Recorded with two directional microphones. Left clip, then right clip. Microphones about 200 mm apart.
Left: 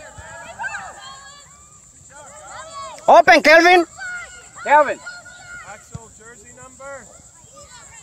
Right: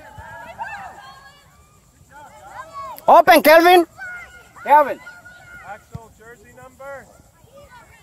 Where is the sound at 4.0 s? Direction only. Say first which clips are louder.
Left 3 dB; 40° left (ahead or behind).